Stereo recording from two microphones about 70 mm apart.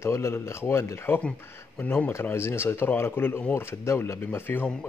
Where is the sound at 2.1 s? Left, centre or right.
Left.